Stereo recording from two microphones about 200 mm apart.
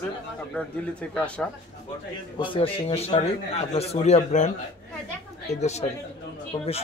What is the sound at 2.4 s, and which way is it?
A man's voice, 25° left (ahead or behind).